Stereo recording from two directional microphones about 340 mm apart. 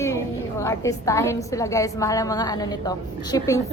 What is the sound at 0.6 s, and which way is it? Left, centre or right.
A woman's voice, centre.